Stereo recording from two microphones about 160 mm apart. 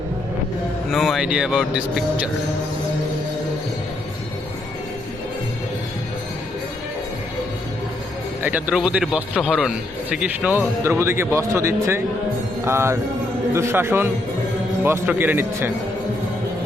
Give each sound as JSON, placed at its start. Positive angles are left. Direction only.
{"t": 0.9, "sound": "speech", "side_deg": 0}
{"t": 8.4, "sound": "a man's voice", "side_deg": -10}